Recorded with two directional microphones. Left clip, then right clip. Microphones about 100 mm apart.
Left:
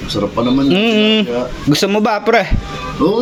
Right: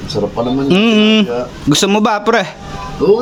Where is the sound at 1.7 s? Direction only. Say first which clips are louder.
Right 2 dB; 40° right (ahead or behind).